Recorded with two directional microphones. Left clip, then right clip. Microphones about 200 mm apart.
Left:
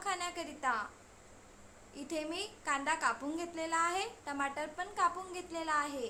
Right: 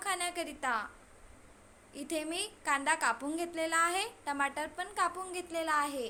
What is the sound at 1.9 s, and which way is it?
A woman's voice, 20° right (ahead or behind).